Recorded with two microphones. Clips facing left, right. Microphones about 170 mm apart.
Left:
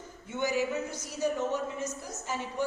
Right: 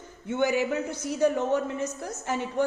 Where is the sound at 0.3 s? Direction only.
60° right (ahead or behind).